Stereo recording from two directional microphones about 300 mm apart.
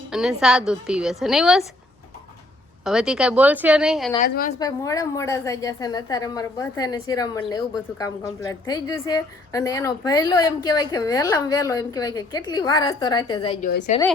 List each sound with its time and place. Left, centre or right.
0.1 s a woman's voice: centre
2.8 s a woman's voice: centre
4.2 s a woman's voice: left
4.6 s a woman's voice: centre
13.7 s a woman's voice: left